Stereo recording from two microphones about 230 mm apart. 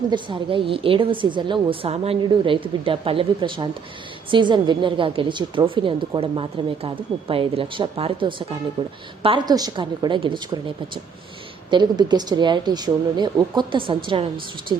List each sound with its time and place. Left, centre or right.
0.1 s a woman's voice: right